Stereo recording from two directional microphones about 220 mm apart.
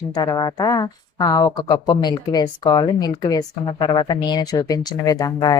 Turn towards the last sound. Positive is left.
turn(degrees=15)  # may be behind; listen again after turning